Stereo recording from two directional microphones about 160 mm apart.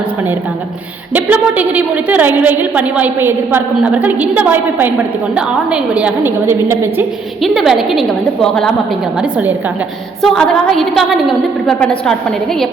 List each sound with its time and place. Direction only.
1.1 s a woman's voice: 10° right (ahead or behind)
7.4 s a woman's voice: centre (ahead or behind)
10.2 s a woman's voice: centre (ahead or behind)